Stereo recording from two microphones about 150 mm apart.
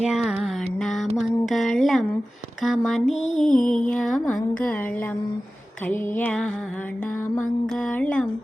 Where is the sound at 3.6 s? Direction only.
60° left (ahead or behind).